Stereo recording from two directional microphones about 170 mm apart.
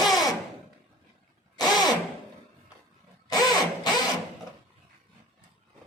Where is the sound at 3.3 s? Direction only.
25° left (ahead or behind).